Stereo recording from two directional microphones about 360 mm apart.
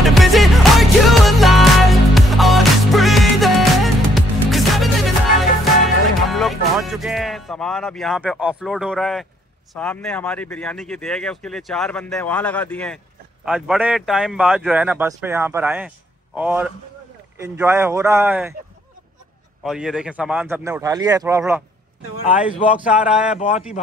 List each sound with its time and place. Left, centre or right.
0.0 s music: centre
6.3 s music: centre
9.8 s speech: centre
19.6 s speech: centre
22.7 s speech: centre
23.3 s speech: centre